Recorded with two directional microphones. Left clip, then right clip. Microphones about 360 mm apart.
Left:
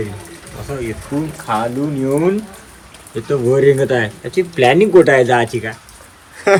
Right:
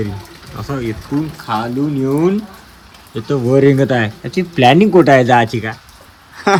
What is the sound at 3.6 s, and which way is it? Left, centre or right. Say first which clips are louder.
A man's voice: even; centre.